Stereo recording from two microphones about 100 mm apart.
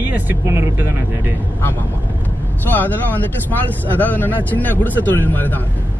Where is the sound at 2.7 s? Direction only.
20° left (ahead or behind).